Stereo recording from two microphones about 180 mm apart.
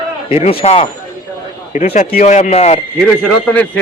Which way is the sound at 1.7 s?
45° left (ahead or behind).